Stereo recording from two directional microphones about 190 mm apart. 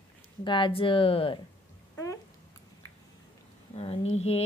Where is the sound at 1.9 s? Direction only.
15° left (ahead or behind).